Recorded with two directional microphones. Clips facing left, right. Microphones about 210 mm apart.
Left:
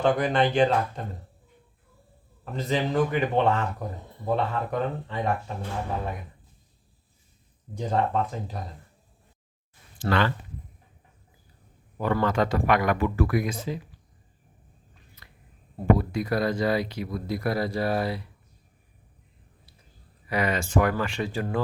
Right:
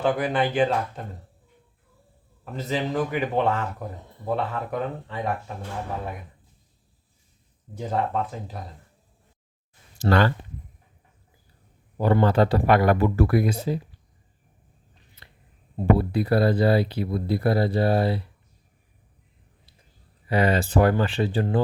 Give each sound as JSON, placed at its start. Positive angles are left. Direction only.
{"t": 0.0, "sound": "speech", "side_deg": -5}
{"t": 2.4, "sound": "speech", "side_deg": -5}
{"t": 7.8, "sound": "speech", "side_deg": -5}
{"t": 10.0, "sound": "speech", "side_deg": -40}
{"t": 11.9, "sound": "speech", "side_deg": -30}
{"t": 15.2, "sound": "a sound", "side_deg": -30}
{"t": 16.0, "sound": "speech", "side_deg": -30}
{"t": 20.2, "sound": "speech", "side_deg": -30}